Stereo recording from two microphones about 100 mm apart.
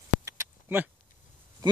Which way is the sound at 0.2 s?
30° right (ahead or behind).